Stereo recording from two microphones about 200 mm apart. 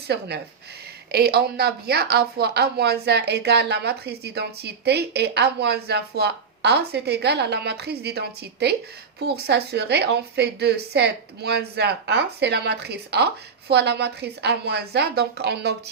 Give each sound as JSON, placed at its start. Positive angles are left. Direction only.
{"t": 1.1, "sound": "a woman's voice", "side_deg": -50}